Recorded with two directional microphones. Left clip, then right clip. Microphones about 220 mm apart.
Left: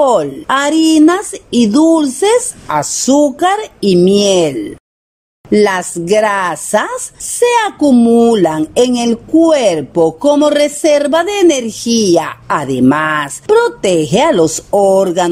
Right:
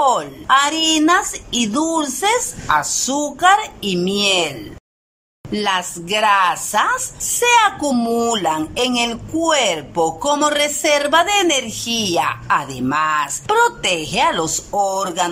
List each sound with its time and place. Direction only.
0.0 s speech: 25° left (ahead or behind)
13.5 s speech: 25° left (ahead or behind)